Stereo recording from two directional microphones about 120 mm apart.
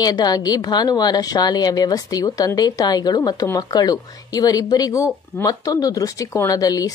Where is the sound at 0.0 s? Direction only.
35° left (ahead or behind).